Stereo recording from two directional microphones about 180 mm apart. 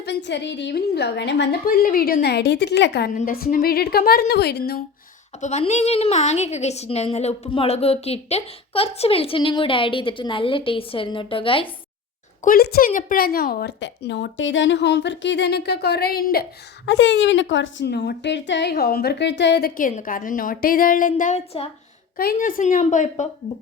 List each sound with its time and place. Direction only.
0.0 s a woman's voice: 70° left (ahead or behind)
3.2 s a woman's voice: 55° left (ahead or behind)
5.4 s a woman's voice: 40° left (ahead or behind)
12.4 s a woman's voice: 55° left (ahead or behind); by 21.7 s 35° left (ahead or behind)
22.2 s a woman's voice: 55° left (ahead or behind)